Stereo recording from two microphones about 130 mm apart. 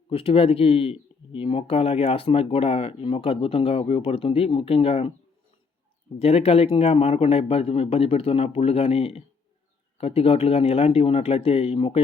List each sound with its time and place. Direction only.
0.1 s speech: 45° left (ahead or behind)
6.1 s speech: 50° left (ahead or behind)